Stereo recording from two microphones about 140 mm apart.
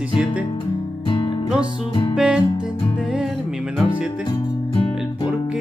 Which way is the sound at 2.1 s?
5° right (ahead or behind).